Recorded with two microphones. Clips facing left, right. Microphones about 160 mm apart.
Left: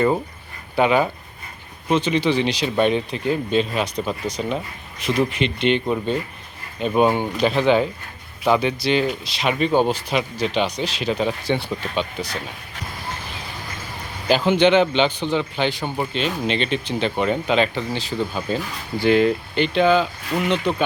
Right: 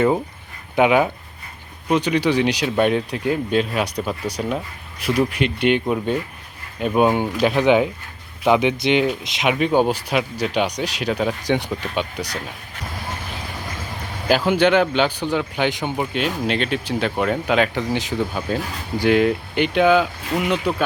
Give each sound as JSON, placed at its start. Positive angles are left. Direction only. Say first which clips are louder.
{"t": 0.8, "sound": "speech", "louder": "right 2 dB", "side_deg": -10}
{"t": 14.3, "sound": "speech", "louder": "even", "side_deg": -5}